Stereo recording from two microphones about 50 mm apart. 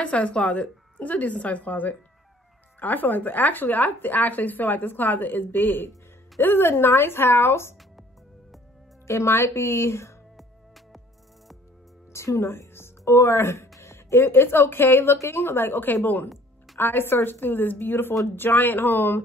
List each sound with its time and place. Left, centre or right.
0.0 s a woman's voice: left
9.0 s speech: left
10.3 s music: centre
12.1 s speech: left
15.1 s a woman's voice: left